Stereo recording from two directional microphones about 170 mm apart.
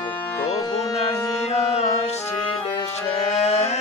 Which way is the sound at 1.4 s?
40° left (ahead or behind).